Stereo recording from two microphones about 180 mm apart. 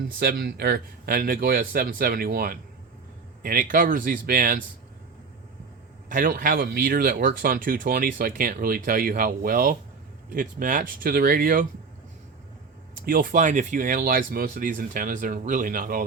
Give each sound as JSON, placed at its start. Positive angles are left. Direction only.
{"t": 0.2, "sound": "speech", "side_deg": -55}
{"t": 6.1, "sound": "speech", "side_deg": -50}
{"t": 13.1, "sound": "speech", "side_deg": -50}